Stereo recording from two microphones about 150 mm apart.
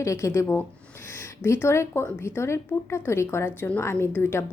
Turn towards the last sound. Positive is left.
turn(degrees=15)  # may be behind; listen again after turning